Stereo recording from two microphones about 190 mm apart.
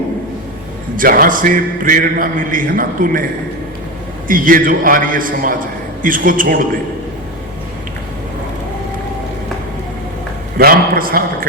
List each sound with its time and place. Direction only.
0.9 s speech: 50° right (ahead or behind)
4.3 s speech: 45° right (ahead or behind)
10.6 s speech: 50° right (ahead or behind)